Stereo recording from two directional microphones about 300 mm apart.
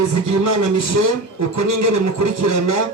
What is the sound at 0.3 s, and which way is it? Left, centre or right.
A man's voice, right.